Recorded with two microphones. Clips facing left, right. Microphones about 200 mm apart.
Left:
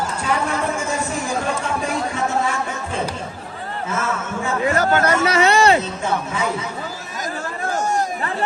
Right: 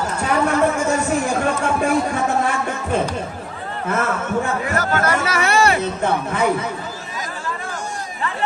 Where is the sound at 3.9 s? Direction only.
55° right (ahead or behind).